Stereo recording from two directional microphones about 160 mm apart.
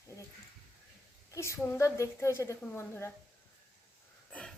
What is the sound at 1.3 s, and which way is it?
A woman's voice, 15° left (ahead or behind).